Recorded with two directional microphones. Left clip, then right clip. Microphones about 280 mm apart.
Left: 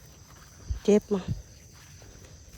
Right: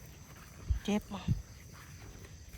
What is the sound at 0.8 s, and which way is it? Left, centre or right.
Cricket, left.